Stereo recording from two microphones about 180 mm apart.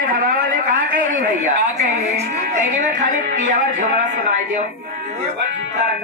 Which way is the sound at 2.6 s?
45° right (ahead or behind).